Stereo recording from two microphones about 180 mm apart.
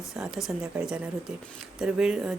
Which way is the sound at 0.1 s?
Centre (ahead or behind).